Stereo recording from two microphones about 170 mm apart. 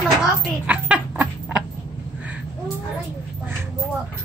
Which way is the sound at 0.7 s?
10° right (ahead or behind).